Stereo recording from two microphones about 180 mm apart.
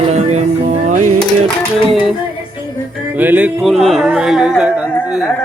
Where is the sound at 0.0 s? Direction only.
35° right (ahead or behind).